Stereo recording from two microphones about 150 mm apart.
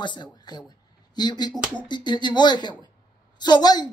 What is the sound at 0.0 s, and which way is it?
Speech, 30° left (ahead or behind).